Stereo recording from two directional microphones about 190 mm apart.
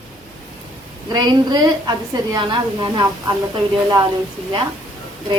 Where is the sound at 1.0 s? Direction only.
25° right (ahead or behind).